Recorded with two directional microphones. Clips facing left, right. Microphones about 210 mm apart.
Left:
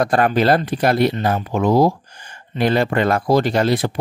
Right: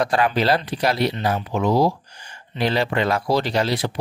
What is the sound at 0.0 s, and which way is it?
Speech, 50° left (ahead or behind).